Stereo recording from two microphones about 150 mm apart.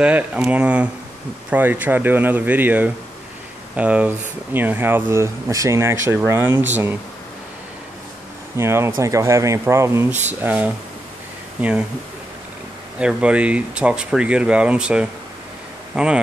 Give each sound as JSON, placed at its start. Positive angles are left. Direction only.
{"t": 0.0, "sound": "speech", "side_deg": -10}
{"t": 8.5, "sound": "speech", "side_deg": -15}
{"t": 13.0, "sound": "speech", "side_deg": -5}